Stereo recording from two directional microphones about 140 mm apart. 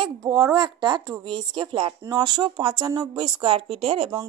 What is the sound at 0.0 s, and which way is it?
A woman's voice, 25° right (ahead or behind).